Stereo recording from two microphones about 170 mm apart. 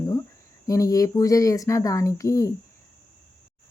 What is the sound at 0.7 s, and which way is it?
Speech, 20° left (ahead or behind).